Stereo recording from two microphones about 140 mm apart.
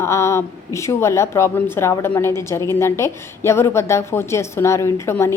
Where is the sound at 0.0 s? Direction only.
20° left (ahead or behind).